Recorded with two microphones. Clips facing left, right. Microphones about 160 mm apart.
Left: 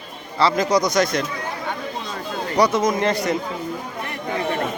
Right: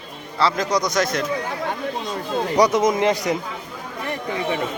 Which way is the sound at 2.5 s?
15° right (ahead or behind).